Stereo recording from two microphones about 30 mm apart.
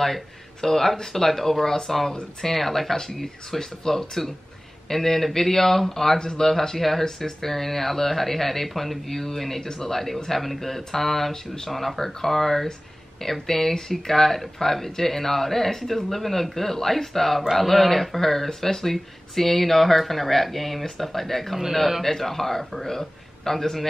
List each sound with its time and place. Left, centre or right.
0.6 s speech: centre
6.1 s speech: left